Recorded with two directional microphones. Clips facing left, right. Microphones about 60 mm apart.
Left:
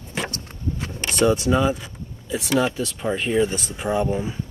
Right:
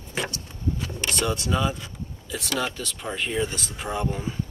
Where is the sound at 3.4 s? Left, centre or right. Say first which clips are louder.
Left 6 dB; left.